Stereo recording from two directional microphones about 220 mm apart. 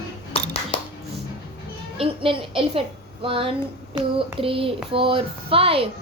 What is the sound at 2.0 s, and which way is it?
A child's voice, 25° right (ahead or behind).